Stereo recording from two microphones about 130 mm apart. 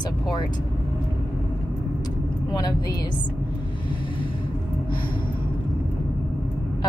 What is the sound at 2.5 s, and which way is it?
Speech, 30° left (ahead or behind).